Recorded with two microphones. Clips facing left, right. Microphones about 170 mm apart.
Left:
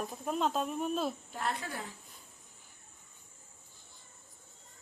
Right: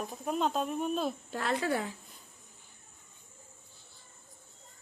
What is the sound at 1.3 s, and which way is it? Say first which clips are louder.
Speech: right 6 dB; 90° right.